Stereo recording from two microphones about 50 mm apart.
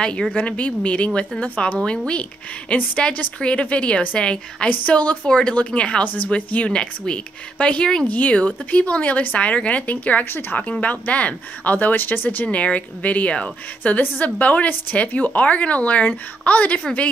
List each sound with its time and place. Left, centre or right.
0.3 s speech: left
8.1 s speech: left
12.4 s speech: left